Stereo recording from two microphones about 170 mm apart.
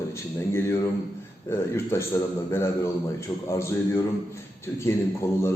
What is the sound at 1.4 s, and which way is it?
A man's voice, 15° left (ahead or behind).